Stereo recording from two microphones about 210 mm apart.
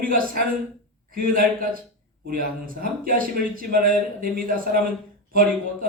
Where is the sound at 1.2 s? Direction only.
40° right (ahead or behind).